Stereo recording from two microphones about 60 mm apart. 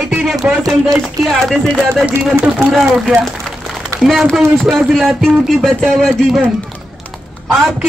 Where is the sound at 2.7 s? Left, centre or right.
Centre.